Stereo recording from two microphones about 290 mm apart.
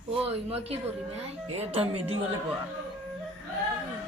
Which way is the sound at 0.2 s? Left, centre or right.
Right.